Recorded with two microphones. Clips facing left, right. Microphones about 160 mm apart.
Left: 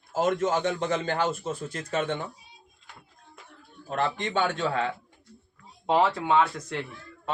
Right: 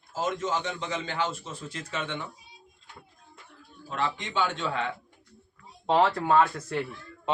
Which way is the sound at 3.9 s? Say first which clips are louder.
Left 3 dB; 50° left (ahead or behind).